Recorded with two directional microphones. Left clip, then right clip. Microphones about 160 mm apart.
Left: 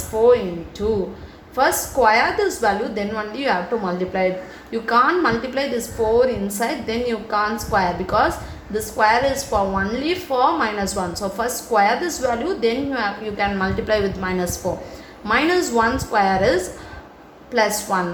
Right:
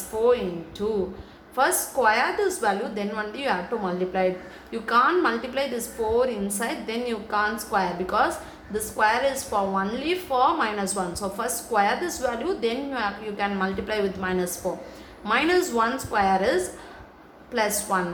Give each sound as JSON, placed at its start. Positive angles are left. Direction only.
{"t": 0.1, "sound": "a woman's voice", "side_deg": 15}